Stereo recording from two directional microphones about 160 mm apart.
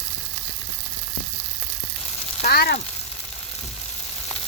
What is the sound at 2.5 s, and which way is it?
Frying, 75° left (ahead or behind).